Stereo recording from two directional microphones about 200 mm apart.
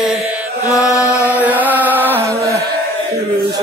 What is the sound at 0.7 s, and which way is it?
Chant, 15° left (ahead or behind).